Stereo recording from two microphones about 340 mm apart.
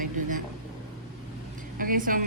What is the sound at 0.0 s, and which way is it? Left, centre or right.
Vehicle, right.